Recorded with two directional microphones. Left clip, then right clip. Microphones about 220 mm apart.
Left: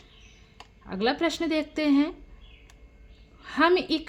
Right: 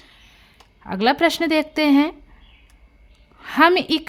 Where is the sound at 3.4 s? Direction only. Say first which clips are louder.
Right 7 dB; 40° right (ahead or behind).